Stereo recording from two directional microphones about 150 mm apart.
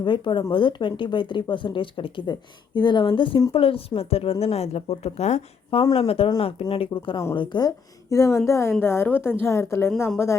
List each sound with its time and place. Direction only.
0.0 s a woman's voice: 30° left (ahead or behind)